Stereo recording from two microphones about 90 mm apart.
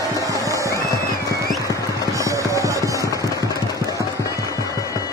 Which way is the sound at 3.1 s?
40° left (ahead or behind).